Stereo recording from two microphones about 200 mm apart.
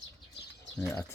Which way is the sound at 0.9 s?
15° left (ahead or behind).